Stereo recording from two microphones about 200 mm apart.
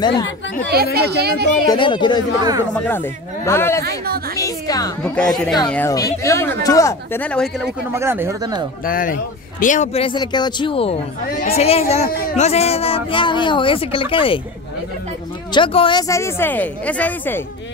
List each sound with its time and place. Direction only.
0.9 s speech: 55° right (ahead or behind)
1.7 s speech: 25° left (ahead or behind)
2.9 s speech: 10° left (ahead or behind)
5.0 s speech: 5° left (ahead or behind)
7.9 s speech: 10° right (ahead or behind)
8.8 s speech: 45° left (ahead or behind); by 14.4 s 25° left (ahead or behind)
15.5 s speech: 25° left (ahead or behind); by 17.4 s 10° left (ahead or behind)